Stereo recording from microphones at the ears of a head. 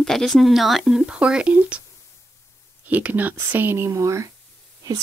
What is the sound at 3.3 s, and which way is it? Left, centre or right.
Speech, right.